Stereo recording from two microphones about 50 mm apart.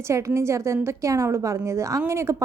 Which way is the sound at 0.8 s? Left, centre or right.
Right.